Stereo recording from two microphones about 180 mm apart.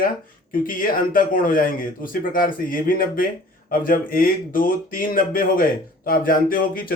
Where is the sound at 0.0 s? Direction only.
50° left (ahead or behind).